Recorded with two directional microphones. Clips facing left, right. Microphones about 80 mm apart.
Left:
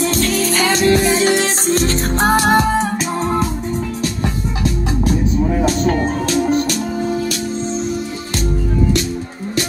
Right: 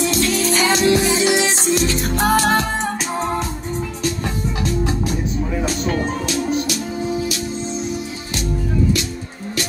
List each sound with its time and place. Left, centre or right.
0.0 s music: left
2.5 s music: centre
6.2 s music: left